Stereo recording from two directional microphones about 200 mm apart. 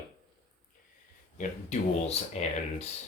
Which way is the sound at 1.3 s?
35° left (ahead or behind).